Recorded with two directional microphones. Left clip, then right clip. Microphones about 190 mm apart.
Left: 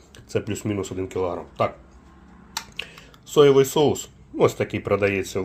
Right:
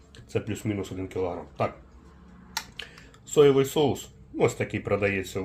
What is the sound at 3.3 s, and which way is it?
Speech, 35° left (ahead or behind).